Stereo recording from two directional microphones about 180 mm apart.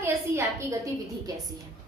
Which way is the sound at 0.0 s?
15° right (ahead or behind).